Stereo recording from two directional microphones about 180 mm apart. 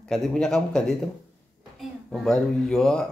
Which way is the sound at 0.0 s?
5° left (ahead or behind).